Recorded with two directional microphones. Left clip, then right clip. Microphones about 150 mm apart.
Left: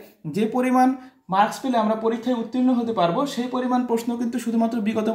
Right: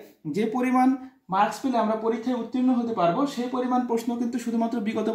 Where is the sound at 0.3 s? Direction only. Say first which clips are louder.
Left 3 dB; 35° left (ahead or behind).